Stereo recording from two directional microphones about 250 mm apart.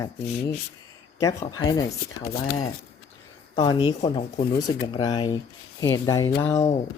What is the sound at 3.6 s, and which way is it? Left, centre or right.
Speech, centre.